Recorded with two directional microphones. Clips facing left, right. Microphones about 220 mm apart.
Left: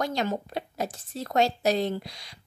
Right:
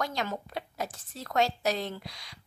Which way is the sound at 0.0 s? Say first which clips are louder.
Left 5 dB; 30° left (ahead or behind).